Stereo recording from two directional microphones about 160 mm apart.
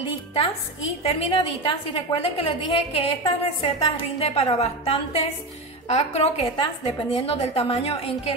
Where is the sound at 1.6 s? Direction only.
30° left (ahead or behind).